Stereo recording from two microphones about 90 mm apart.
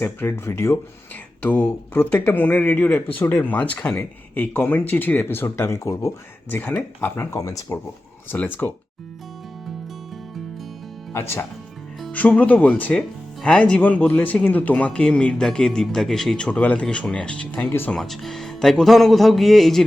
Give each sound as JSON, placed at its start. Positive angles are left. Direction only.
{"t": 0.0, "sound": "speech", "side_deg": 25}
{"t": 6.5, "sound": "speech", "side_deg": 20}
{"t": 7.3, "sound": "speech", "side_deg": 40}
{"t": 8.3, "sound": "speech", "side_deg": 20}
{"t": 11.1, "sound": "speech", "side_deg": 25}
{"t": 12.1, "sound": "speech", "side_deg": 15}
{"t": 17.9, "sound": "speech", "side_deg": 5}